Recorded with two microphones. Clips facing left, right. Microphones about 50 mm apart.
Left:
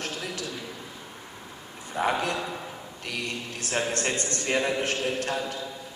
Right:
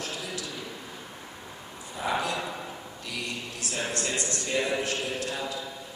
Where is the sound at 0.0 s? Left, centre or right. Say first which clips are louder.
Left 2 dB; left.